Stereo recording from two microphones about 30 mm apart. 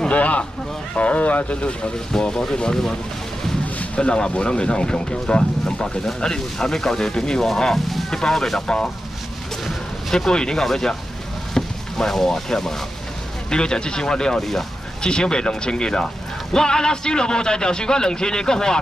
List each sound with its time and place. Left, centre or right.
0.1 s a sound: left
0.9 s speech: left
2.1 s a man's voice: centre
3.7 s a sound: left
4.1 s a man's voice: left; by 7.7 s centre
7.7 s speech: centre
8.1 s speech: centre
10.1 s a man's voice: left
10.6 s speech: centre
13.5 s a man's voice: left